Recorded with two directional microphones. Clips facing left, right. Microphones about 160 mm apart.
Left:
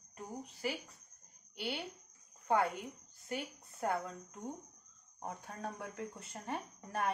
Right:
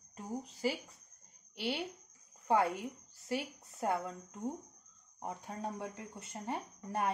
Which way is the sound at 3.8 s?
25° right (ahead or behind).